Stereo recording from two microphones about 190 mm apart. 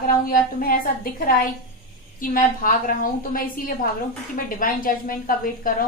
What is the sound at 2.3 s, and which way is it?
A woman's voice, 45° left (ahead or behind).